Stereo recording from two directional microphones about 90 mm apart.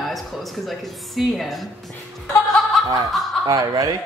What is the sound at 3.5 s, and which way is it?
Speech, 40° right (ahead or behind).